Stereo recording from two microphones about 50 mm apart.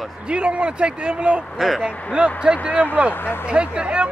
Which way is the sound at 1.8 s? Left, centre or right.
Centre.